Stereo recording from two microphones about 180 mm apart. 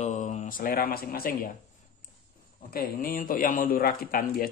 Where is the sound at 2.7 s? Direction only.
55° left (ahead or behind).